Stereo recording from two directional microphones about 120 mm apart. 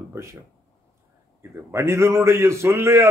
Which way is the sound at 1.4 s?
20° right (ahead or behind).